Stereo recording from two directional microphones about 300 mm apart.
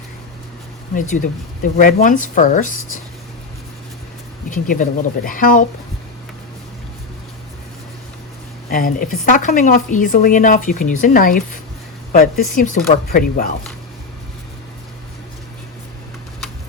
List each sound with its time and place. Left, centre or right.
1.1 s a woman's voice: left
4.4 s a woman's voice: left
8.7 s a woman's voice: left